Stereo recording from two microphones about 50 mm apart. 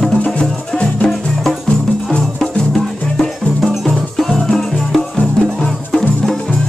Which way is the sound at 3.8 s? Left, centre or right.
Centre.